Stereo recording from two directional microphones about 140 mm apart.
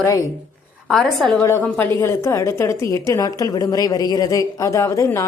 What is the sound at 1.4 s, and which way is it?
Speech, 15° left (ahead or behind).